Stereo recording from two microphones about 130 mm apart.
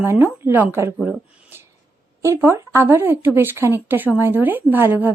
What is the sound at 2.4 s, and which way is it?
Speech, 20° right (ahead or behind).